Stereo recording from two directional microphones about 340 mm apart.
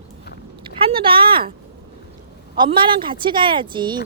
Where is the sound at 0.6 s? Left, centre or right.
Centre.